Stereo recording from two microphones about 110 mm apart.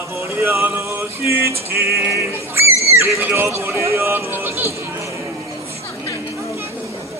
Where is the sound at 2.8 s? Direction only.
25° right (ahead or behind).